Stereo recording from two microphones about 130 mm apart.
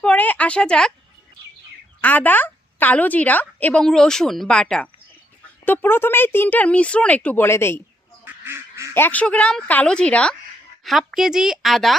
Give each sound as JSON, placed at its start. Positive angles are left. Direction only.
{"t": 0.0, "sound": "speech", "side_deg": 10}
{"t": 2.0, "sound": "a woman's voice", "side_deg": 10}
{"t": 8.2, "sound": "duck", "side_deg": -20}
{"t": 8.9, "sound": "a woman's voice", "side_deg": 15}
{"t": 10.8, "sound": "a woman's voice", "side_deg": 0}